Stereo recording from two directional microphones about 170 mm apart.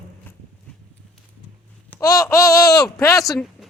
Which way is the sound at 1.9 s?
20° left (ahead or behind).